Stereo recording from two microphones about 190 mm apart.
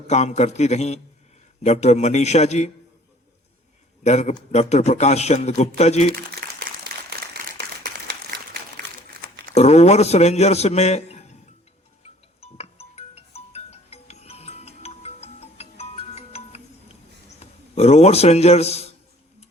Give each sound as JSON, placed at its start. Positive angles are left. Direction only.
{"t": 0.1, "sound": "a man's voice", "side_deg": 35}
{"t": 4.0, "sound": "a man's voice", "side_deg": 35}
{"t": 7.3, "sound": "a sound", "side_deg": -60}
{"t": 9.0, "sound": "crumpling", "side_deg": -50}
{"t": 9.6, "sound": "a man's voice", "side_deg": 35}
{"t": 12.4, "sound": "music", "side_deg": 35}
{"t": 17.2, "sound": "a man's voice", "side_deg": 35}